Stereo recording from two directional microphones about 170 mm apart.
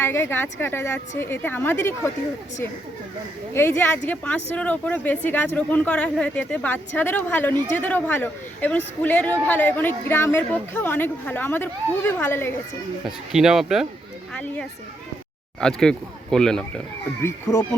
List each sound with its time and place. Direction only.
0.0 s speech: 15° left (ahead or behind)
3.5 s speech: 15° left (ahead or behind)
13.1 s speech: centre (ahead or behind)
17.2 s speech: 15° left (ahead or behind)